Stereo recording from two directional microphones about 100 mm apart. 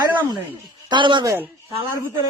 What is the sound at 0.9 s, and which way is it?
Speech, 50° right (ahead or behind).